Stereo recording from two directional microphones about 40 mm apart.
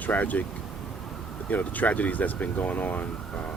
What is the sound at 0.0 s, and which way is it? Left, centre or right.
Speech, left.